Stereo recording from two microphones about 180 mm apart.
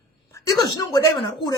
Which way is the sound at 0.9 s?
20° left (ahead or behind).